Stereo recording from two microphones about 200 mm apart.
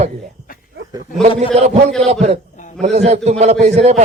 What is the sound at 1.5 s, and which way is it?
Speech, 30° right (ahead or behind).